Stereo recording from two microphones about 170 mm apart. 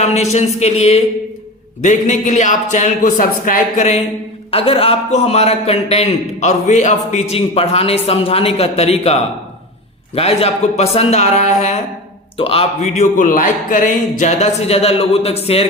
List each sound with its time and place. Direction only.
0.0 s a man's voice: 40° left (ahead or behind)
4.5 s a man's voice: 35° left (ahead or behind)